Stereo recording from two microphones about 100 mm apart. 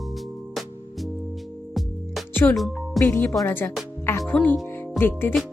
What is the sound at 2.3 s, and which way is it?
Music, 20° left (ahead or behind).